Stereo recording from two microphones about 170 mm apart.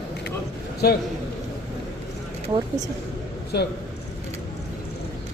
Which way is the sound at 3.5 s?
75° left (ahead or behind).